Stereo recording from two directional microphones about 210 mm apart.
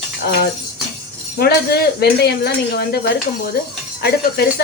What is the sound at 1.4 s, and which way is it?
A woman's voice, 45° left (ahead or behind).